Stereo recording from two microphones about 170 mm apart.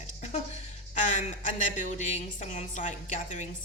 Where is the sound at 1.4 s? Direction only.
45° left (ahead or behind).